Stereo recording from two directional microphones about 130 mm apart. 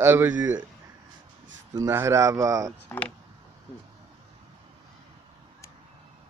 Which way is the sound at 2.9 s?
15° left (ahead or behind).